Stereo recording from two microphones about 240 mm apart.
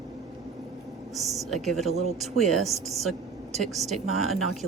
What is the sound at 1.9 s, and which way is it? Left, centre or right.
Speech, left.